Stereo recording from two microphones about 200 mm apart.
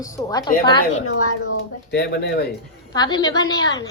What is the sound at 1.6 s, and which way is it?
Speech, 60° left (ahead or behind).